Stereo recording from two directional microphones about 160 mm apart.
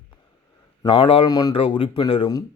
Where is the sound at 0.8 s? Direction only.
35° left (ahead or behind).